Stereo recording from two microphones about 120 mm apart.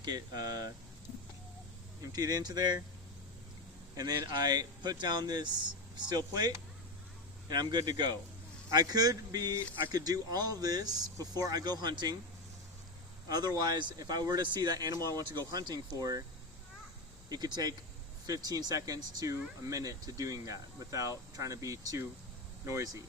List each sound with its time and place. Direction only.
0.0 s speech: 35° right (ahead or behind)
2.1 s speech: 30° right (ahead or behind)
3.9 s speech: 35° right (ahead or behind)
13.2 s speech: 35° right (ahead or behind)
17.2 s speech: 35° right (ahead or behind)